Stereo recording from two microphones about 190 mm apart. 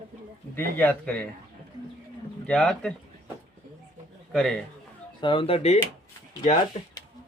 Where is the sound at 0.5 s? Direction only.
10° left (ahead or behind).